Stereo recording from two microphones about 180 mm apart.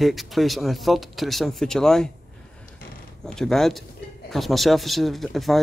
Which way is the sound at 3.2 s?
5° left (ahead or behind).